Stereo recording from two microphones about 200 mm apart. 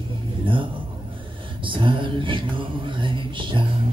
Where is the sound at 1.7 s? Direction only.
25° right (ahead or behind).